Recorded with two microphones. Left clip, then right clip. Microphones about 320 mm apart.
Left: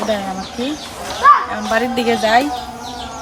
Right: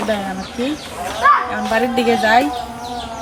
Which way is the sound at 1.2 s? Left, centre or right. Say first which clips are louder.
Left 3 dB; left.